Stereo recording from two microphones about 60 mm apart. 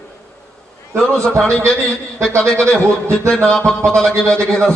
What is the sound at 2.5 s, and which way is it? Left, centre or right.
A man's voice, centre.